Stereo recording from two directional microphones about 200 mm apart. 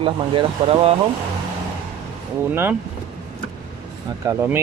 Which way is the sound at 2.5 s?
10° right (ahead or behind).